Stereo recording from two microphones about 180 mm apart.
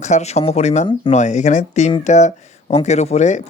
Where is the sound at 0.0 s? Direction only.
40° left (ahead or behind).